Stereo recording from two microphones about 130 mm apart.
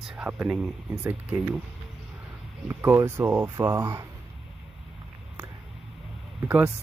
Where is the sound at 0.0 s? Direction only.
5° right (ahead or behind).